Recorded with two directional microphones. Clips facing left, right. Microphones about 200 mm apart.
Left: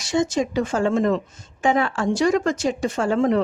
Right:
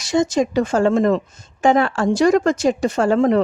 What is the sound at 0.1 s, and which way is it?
A woman's voice, 40° right (ahead or behind).